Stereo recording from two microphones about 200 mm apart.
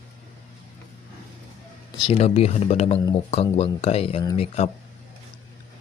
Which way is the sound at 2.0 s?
30° left (ahead or behind).